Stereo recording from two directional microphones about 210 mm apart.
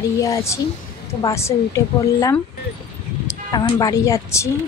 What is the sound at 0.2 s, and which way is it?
A woman's voice, 15° left (ahead or behind).